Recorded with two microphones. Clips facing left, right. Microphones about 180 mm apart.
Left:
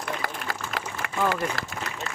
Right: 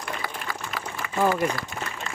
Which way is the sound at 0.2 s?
45° left (ahead or behind).